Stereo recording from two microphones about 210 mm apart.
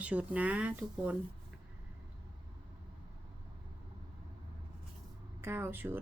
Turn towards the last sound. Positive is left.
turn(degrees=-10)  # may be behind; listen again after turning